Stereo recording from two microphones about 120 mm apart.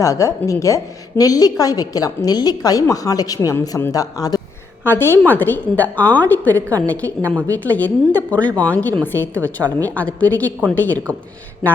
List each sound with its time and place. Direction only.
0.0 s a woman's voice: 25° left (ahead or behind)
4.8 s a woman's voice: 20° left (ahead or behind)